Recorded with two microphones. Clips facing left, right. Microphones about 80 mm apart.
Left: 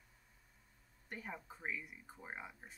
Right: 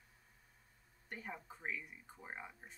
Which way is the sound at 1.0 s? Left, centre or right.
Centre.